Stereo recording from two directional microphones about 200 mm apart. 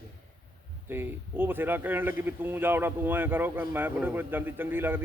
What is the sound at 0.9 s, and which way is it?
Speech, 10° right (ahead or behind).